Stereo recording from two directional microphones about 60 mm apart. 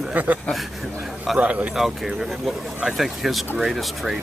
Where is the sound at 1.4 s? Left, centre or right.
Right.